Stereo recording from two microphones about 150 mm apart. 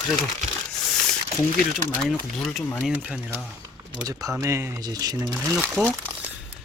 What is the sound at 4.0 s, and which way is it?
Speech, 25° right (ahead or behind).